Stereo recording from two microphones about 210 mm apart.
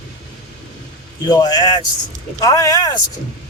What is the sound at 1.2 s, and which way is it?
A man's voice, 20° left (ahead or behind).